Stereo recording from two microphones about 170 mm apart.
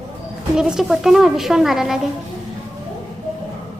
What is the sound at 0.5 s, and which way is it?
A woman's voice, 5° right (ahead or behind).